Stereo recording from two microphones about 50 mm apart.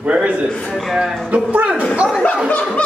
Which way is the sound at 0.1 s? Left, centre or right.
Right.